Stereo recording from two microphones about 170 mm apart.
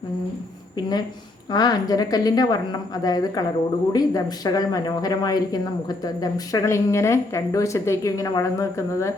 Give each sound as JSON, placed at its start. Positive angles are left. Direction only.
{"t": 1.5, "sound": "speech", "side_deg": 25}